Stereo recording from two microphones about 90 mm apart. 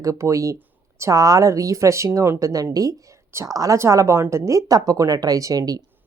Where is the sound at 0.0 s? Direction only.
35° right (ahead or behind).